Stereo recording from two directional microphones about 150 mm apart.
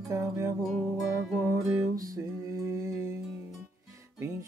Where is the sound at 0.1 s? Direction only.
20° right (ahead or behind).